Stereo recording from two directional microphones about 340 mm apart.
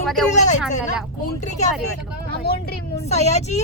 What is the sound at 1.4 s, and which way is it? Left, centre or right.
Speech, centre.